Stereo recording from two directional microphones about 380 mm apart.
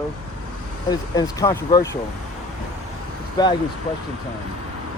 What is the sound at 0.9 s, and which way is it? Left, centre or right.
Speech, centre.